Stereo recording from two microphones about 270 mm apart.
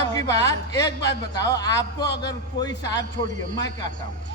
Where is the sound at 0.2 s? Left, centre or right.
Centre.